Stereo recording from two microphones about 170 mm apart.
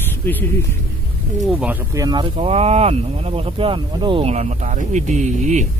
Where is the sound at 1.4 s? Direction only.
Centre (ahead or behind).